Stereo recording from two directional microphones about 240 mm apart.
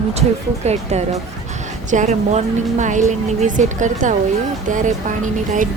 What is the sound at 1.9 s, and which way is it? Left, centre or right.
A woman's voice, right.